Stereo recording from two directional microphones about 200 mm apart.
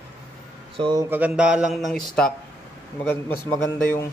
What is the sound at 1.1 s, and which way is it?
A man's voice, 5° right (ahead or behind).